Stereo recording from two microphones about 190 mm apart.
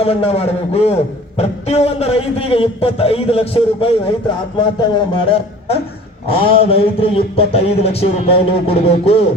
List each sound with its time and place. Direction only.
0.0 s a man's voice: 30° left (ahead or behind)